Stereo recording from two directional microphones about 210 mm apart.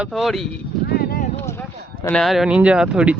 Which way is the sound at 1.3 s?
10° left (ahead or behind).